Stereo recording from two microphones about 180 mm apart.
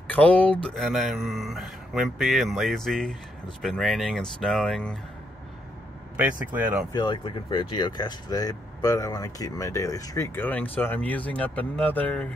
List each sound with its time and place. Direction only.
0.1 s speech: 10° left (ahead or behind)
6.1 s speech: 10° right (ahead or behind)
6.9 s speech: 25° left (ahead or behind); by 12.3 s 5° left (ahead or behind)